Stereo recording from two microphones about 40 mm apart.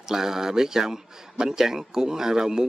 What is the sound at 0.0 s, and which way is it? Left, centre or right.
A man's voice, centre.